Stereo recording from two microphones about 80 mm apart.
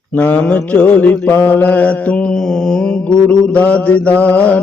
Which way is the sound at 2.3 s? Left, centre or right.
Centre.